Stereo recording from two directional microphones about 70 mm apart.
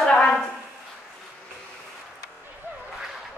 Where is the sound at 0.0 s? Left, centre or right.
Centre.